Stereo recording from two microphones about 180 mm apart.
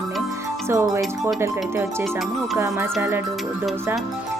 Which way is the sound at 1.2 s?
15° right (ahead or behind).